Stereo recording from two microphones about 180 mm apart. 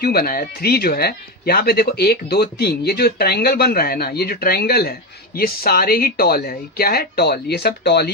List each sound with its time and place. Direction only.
0.0 s speech: 60° left (ahead or behind)